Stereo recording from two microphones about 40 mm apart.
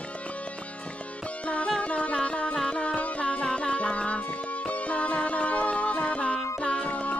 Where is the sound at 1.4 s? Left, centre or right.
Left.